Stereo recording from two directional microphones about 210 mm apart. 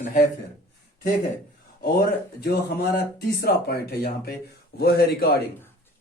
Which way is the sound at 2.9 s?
45° left (ahead or behind).